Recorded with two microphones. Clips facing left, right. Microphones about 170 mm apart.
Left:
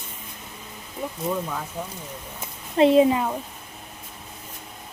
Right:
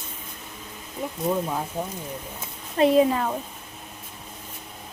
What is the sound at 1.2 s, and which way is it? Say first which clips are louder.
Speech: right 3 dB; 20° right (ahead or behind).